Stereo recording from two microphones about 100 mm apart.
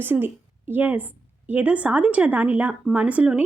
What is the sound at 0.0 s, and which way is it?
A woman's voice, 20° right (ahead or behind).